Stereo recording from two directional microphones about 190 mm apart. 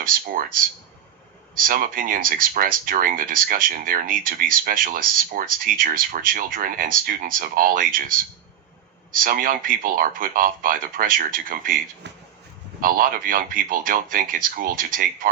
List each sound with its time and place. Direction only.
1.6 s speech: 50° right (ahead or behind)
9.2 s speech: 45° right (ahead or behind)
12.0 s speech: 65° right (ahead or behind)
12.8 s speech: 50° right (ahead or behind)